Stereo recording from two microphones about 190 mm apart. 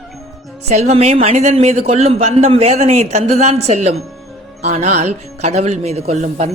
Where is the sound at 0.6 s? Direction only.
35° right (ahead or behind).